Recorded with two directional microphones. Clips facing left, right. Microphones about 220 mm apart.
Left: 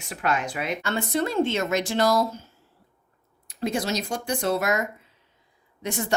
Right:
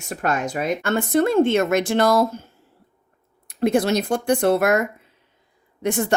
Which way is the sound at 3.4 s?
55° right (ahead or behind).